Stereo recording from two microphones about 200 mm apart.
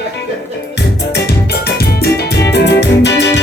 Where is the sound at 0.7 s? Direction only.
55° left (ahead or behind).